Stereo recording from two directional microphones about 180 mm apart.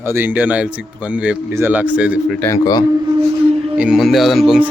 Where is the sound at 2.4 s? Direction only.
20° left (ahead or behind).